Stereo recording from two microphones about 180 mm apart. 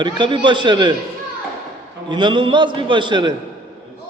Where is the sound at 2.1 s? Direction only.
25° right (ahead or behind).